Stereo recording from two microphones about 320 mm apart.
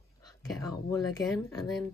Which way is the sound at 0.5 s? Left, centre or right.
Centre.